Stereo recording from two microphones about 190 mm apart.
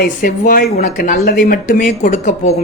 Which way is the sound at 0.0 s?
45° left (ahead or behind).